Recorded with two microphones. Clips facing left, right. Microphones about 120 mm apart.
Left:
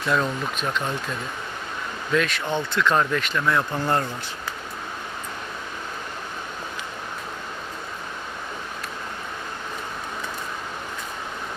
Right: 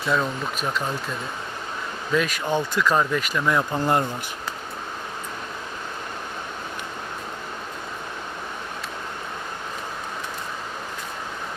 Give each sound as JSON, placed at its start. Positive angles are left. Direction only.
{"t": 0.0, "sound": "speech", "side_deg": 0}
{"t": 2.1, "sound": "speech", "side_deg": -10}